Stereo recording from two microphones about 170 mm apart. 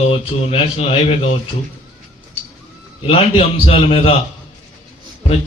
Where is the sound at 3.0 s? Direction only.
35° left (ahead or behind).